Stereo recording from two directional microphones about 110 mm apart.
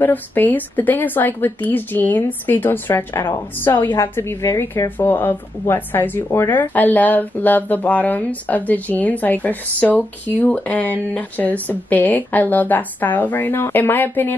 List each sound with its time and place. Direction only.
0.0 s speech: 15° left (ahead or behind)